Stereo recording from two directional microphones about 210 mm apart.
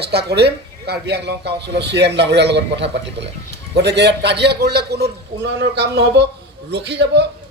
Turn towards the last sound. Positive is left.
turn(degrees=-55)  # may be behind; listen again after turning